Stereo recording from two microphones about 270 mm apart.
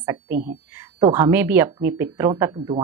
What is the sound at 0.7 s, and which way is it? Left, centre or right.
Speech, centre.